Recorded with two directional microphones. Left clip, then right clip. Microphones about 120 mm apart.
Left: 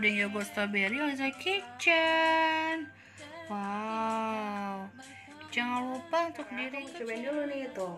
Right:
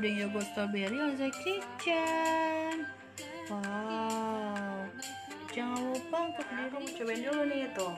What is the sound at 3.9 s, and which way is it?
Livestock, 5° left (ahead or behind).